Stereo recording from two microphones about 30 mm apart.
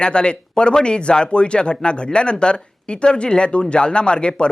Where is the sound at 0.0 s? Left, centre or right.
Left.